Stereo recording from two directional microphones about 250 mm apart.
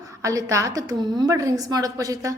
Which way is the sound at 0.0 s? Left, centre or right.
Centre.